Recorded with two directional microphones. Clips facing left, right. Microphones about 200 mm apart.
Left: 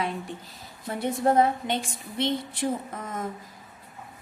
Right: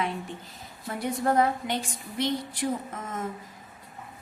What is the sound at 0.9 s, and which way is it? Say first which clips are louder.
A woman's voice: left 3 dB; 25° left (ahead or behind).